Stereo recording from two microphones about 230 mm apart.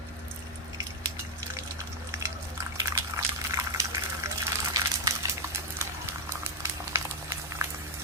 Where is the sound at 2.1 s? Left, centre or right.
Centre.